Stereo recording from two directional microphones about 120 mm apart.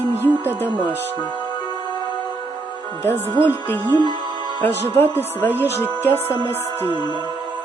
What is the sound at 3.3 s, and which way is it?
Speech, 15° left (ahead or behind).